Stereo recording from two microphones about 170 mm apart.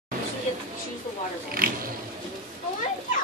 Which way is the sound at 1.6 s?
55° right (ahead or behind).